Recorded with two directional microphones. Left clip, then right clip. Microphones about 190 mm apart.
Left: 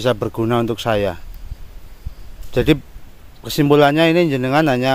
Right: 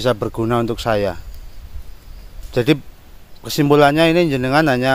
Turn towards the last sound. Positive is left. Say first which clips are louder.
# right 1 dB
turn(degrees=0)  # may be behind; listen again after turning